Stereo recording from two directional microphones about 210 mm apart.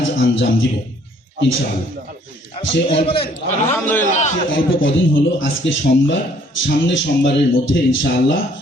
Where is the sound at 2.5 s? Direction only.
25° left (ahead or behind).